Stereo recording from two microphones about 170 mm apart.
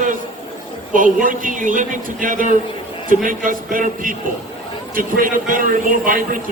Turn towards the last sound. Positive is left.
turn(degrees=-55)  # may be behind; listen again after turning